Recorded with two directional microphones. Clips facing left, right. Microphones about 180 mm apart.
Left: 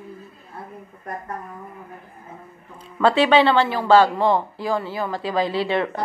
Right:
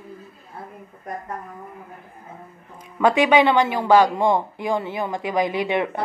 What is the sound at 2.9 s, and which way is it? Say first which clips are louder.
Speech: even; 15° right (ahead or behind).